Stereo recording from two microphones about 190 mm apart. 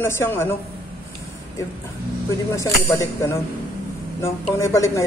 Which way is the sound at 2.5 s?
15° left (ahead or behind).